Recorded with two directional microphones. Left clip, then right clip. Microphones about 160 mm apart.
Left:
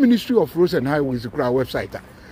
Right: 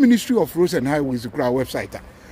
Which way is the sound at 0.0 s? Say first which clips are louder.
Even; 20° right (ahead or behind).